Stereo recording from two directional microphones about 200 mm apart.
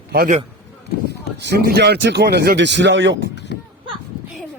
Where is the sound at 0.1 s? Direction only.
50° right (ahead or behind).